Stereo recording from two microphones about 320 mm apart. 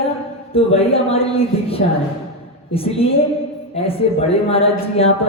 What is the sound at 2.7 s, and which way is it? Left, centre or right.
A woman's voice, centre.